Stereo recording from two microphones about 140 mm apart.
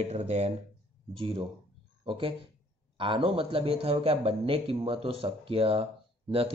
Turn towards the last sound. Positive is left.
turn(degrees=-40)  # may be behind; listen again after turning